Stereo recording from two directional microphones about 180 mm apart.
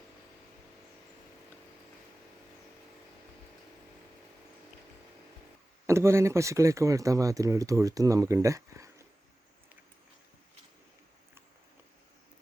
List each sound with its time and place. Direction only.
5.8 s speech: 15° right (ahead or behind)